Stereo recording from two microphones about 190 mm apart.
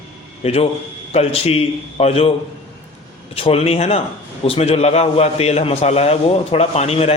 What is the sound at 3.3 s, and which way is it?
A man's voice, 30° left (ahead or behind).